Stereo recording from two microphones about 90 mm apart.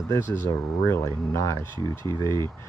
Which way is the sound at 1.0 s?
35° left (ahead or behind).